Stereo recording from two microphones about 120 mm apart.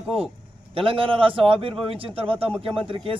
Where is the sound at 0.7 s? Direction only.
50° right (ahead or behind).